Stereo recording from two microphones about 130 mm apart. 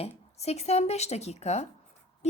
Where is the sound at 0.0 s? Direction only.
55° left (ahead or behind).